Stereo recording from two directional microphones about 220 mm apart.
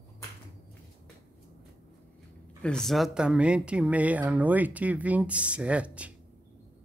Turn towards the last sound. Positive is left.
turn(degrees=-5)  # may be behind; listen again after turning